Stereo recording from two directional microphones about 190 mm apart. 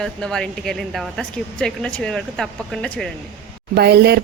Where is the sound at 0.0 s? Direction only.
Centre (ahead or behind).